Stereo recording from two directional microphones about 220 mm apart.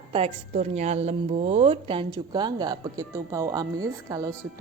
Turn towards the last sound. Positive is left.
turn(degrees=-15)  # may be behind; listen again after turning